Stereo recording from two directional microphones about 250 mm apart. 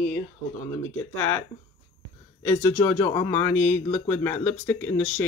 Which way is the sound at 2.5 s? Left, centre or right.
Centre.